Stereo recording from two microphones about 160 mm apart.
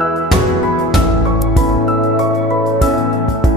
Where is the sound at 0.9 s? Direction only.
Centre (ahead or behind).